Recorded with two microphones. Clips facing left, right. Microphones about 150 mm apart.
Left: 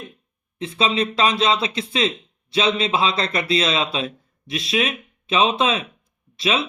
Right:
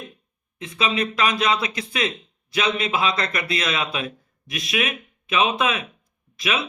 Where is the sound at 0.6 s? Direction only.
30° left (ahead or behind).